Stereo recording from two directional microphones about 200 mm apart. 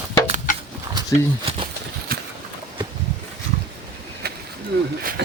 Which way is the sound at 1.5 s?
30° right (ahead or behind).